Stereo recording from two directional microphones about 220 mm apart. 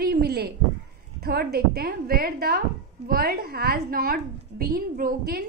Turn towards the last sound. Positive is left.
turn(degrees=-40)  # may be behind; listen again after turning